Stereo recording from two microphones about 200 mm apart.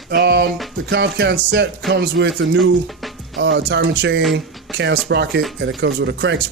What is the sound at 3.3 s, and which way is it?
Speech, 60° right (ahead or behind).